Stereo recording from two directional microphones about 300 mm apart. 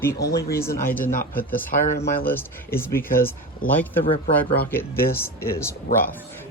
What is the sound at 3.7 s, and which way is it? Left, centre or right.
Speech, centre.